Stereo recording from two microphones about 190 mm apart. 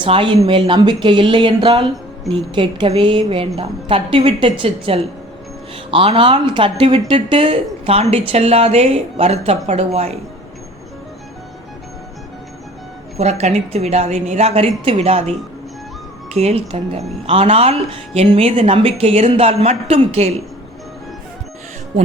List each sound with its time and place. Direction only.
0.0 s speech: 25° right (ahead or behind)
13.1 s speech: 35° right (ahead or behind)